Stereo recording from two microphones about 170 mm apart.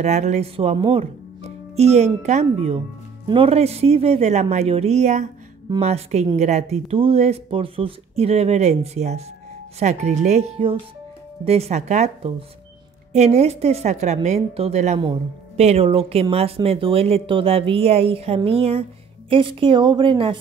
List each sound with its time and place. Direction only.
0.0 s speech: 40° right (ahead or behind)